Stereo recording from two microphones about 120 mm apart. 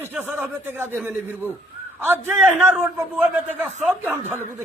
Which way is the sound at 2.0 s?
15° right (ahead or behind).